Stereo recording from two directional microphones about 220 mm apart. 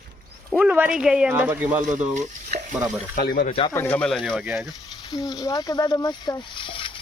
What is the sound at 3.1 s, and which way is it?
Speech, 45° left (ahead or behind).